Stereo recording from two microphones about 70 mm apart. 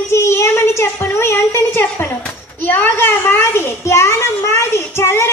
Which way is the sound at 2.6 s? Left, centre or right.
Left.